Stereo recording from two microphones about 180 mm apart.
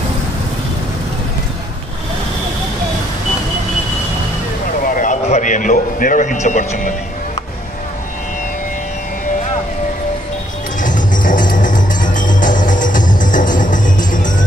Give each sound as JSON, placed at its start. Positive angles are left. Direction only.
{"t": 4.9, "sound": "a man's voice", "side_deg": 45}
{"t": 10.8, "sound": "music", "side_deg": 45}